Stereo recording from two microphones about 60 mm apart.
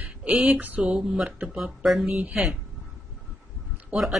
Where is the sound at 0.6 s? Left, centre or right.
Right.